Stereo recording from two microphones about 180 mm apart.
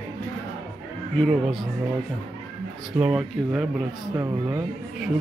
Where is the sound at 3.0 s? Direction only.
Centre (ahead or behind).